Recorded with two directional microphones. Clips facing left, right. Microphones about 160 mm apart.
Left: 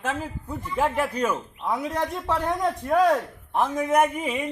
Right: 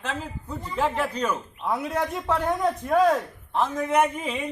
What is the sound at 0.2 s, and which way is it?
A man's voice, 10° left (ahead or behind).